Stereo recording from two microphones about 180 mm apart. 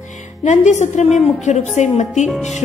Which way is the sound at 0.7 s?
40° left (ahead or behind).